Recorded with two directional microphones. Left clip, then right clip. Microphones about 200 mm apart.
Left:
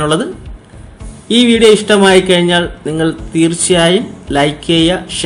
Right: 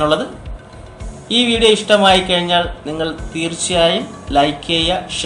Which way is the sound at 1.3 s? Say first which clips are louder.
Left 5 dB; 40° left (ahead or behind).